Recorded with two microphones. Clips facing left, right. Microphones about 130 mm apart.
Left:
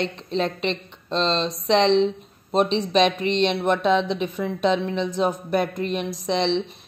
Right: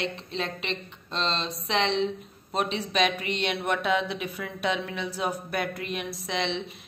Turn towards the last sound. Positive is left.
turn(degrees=30)  # may be behind; listen again after turning